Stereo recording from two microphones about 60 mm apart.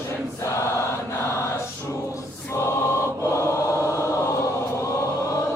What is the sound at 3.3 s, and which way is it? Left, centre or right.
Chant, left.